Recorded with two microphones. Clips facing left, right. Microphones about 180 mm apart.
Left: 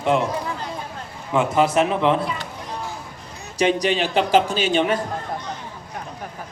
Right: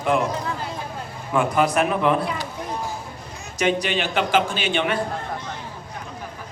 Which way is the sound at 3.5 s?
35° left (ahead or behind).